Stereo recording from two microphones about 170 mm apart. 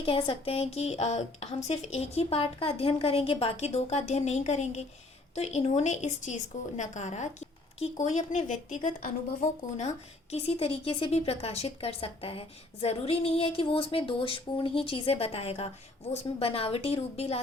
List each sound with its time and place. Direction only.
0.0 s a woman's voice: 30° left (ahead or behind)
10.3 s a woman's voice: 35° left (ahead or behind)